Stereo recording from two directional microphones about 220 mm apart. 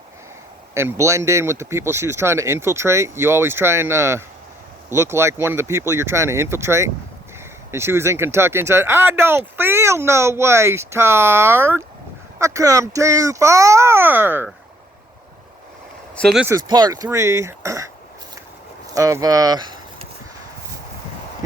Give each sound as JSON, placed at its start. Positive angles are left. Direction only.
{"t": 0.7, "sound": "speech", "side_deg": -10}
{"t": 16.1, "sound": "speech", "side_deg": 0}
{"t": 16.6, "sound": "speech", "side_deg": -20}
{"t": 18.9, "sound": "speech", "side_deg": -15}